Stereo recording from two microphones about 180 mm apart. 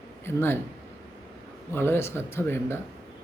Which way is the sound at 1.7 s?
15° left (ahead or behind).